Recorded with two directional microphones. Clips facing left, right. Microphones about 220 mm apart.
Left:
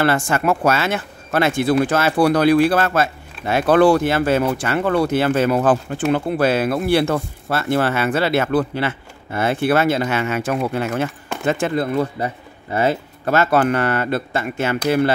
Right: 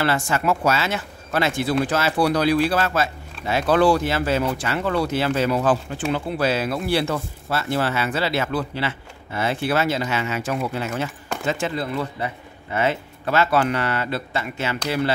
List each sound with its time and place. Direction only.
0.0 s speech: 55° left (ahead or behind)